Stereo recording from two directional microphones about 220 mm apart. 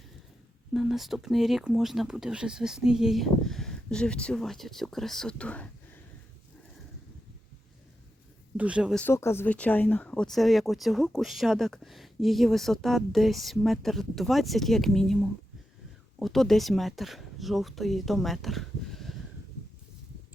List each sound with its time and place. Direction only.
0.7 s speech: centre (ahead or behind)
8.5 s speech: 5° right (ahead or behind)
9.0 s speech: 10° left (ahead or behind)